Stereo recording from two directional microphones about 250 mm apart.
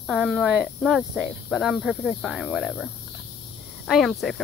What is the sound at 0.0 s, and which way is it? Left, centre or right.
Speech, centre.